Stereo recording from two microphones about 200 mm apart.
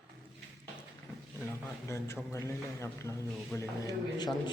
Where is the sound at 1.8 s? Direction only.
15° left (ahead or behind).